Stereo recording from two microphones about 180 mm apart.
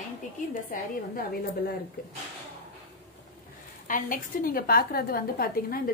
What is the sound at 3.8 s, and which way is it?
A woman's voice, 50° left (ahead or behind).